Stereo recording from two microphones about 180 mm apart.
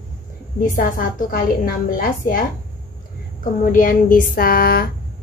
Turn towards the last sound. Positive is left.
turn(degrees=55)  # may be behind; listen again after turning